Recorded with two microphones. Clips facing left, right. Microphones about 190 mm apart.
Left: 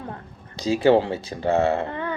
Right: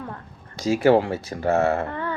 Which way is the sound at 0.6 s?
25° left (ahead or behind).